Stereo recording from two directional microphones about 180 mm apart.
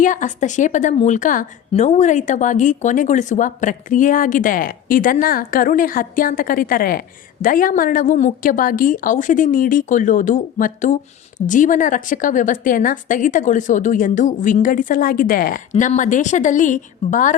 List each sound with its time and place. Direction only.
0.0 s a woman's voice: 45° left (ahead or behind)
15.7 s a woman's voice: 40° left (ahead or behind)